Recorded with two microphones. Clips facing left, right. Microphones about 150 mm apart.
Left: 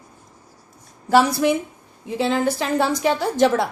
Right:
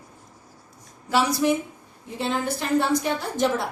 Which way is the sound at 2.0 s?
90° left.